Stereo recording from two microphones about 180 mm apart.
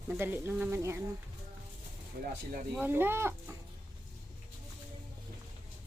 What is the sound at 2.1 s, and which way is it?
Speech, 60° right (ahead or behind).